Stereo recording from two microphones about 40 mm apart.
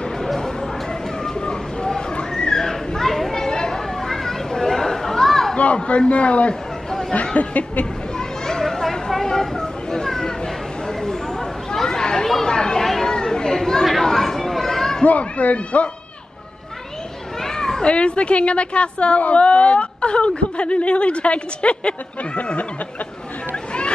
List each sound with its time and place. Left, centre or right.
0.2 s a sound: centre
3.4 s chatter: centre
5.8 s speech: left
6.9 s chatter: centre
7.3 s speech: left
8.2 s children playing: centre
12.4 s chatter: centre
12.8 s children playing: centre
13.1 s children playing: centre
14.0 s a sound: centre
15.0 s speech: left
17.4 s children playing: centre
17.8 s a woman's voice: left
23.5 s a sound: left